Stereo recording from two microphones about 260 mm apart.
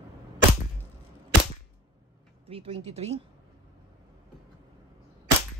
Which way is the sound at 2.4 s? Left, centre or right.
Right.